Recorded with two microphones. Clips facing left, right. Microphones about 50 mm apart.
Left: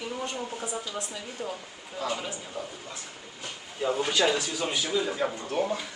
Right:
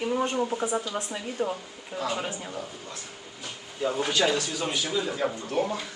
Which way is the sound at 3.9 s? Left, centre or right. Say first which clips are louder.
Right 1 dB; centre.